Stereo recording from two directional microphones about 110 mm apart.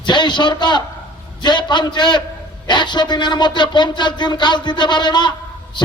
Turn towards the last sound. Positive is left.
turn(degrees=45)  # may be behind; listen again after turning